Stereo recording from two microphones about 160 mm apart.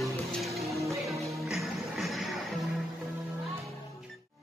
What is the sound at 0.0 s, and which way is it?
Music, centre (ahead or behind).